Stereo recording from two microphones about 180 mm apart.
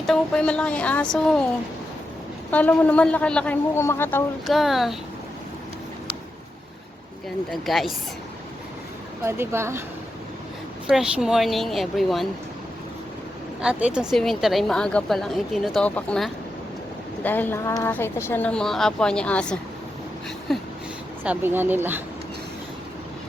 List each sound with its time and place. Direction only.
0.1 s a woman's voice: 5° left (ahead or behind)
2.5 s speech: 10° left (ahead or behind)
4.4 s a woman's voice: centre (ahead or behind)
7.5 s a woman's voice: centre (ahead or behind)
9.2 s speech: 15° right (ahead or behind)
10.8 s a woman's voice: 5° right (ahead or behind)
13.6 s a woman's voice: 5° right (ahead or behind)
21.2 s speech: 10° right (ahead or behind)